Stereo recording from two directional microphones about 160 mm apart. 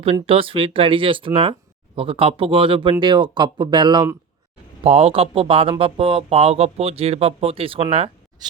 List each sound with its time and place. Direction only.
0.0 s speech: 35° right (ahead or behind)
4.8 s speech: 40° right (ahead or behind)